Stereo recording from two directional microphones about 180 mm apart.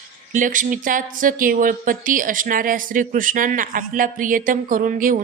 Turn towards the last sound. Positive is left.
turn(degrees=-50)  # may be behind; listen again after turning